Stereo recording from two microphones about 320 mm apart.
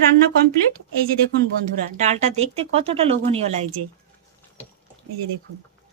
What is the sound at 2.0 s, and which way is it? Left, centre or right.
Speech, right.